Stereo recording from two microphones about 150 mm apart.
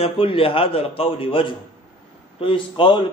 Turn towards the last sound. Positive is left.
turn(degrees=35)  # may be behind; listen again after turning